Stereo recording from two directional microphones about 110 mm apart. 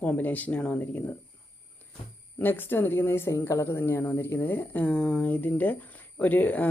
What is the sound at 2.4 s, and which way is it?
Speech, 20° left (ahead or behind).